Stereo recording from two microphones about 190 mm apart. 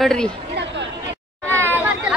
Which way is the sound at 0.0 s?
5° left (ahead or behind).